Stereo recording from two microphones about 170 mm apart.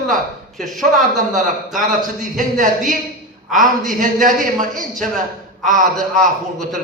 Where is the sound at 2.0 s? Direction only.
50° right (ahead or behind).